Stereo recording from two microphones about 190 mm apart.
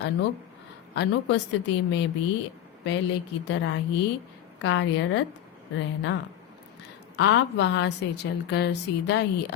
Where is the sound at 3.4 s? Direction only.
80° left.